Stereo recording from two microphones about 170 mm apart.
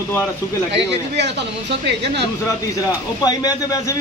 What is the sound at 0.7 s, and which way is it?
Speech, 90° right.